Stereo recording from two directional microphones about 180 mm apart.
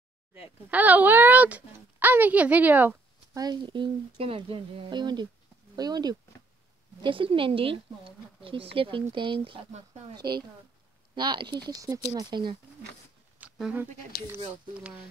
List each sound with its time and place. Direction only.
0.7 s speech: 10° right (ahead or behind)
3.4 s speech: 25° right (ahead or behind)
13.4 s a sound: 5° right (ahead or behind)
14.8 s speech: 5° right (ahead or behind)